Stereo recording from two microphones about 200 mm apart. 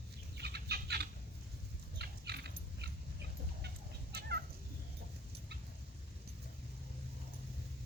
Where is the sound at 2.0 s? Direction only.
55° right (ahead or behind).